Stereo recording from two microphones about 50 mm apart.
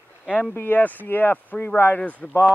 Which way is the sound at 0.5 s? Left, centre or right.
Left.